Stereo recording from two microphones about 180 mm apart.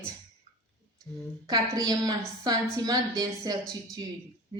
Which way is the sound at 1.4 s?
20° right (ahead or behind).